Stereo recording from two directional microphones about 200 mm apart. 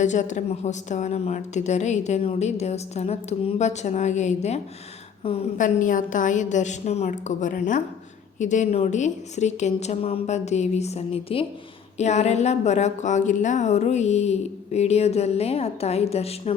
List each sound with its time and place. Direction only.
0.0 s a woman's voice: 35° left (ahead or behind)